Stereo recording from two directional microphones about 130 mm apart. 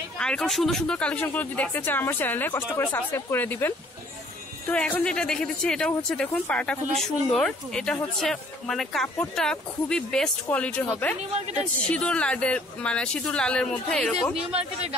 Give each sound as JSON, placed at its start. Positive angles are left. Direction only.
{"t": 0.2, "sound": "speech", "side_deg": 5}
{"t": 11.1, "sound": "speech", "side_deg": -60}
{"t": 11.9, "sound": "speech", "side_deg": 10}
{"t": 14.4, "sound": "speech", "side_deg": -50}